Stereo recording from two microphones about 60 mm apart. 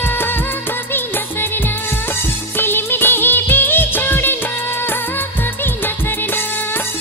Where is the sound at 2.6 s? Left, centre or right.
Left.